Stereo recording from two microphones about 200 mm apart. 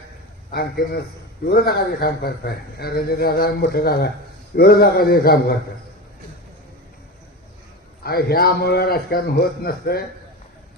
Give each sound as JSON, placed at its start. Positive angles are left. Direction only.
{"t": 0.5, "sound": "a man's voice", "side_deg": 50}
{"t": 8.0, "sound": "a man's voice", "side_deg": 50}